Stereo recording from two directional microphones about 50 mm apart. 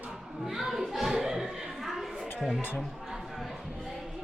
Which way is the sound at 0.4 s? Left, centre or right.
Centre.